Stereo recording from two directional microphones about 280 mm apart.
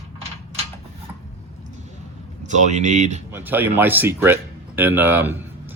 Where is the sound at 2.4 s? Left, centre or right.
Right.